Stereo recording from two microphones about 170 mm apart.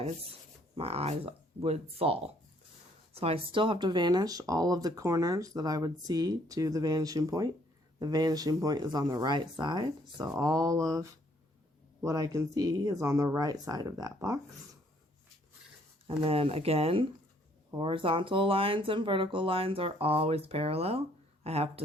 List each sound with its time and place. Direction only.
0.8 s speech: 35° right (ahead or behind); by 14.3 s 20° right (ahead or behind)
16.0 s speech: 35° right (ahead or behind)